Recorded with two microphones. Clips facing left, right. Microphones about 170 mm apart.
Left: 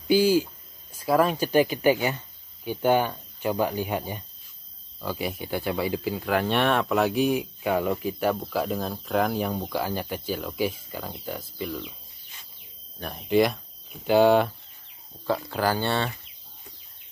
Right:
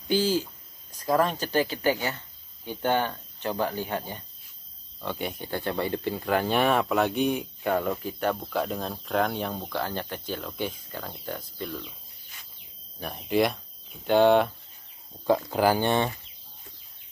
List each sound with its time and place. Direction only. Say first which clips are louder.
0.1 s speech: left 5 dB; 10° left (ahead or behind)
5.0 s speech: left 2 dB; centre (ahead or behind)
13.0 s speech: left 3 dB; centre (ahead or behind)
15.2 s speech: right 3 dB; 15° right (ahead or behind)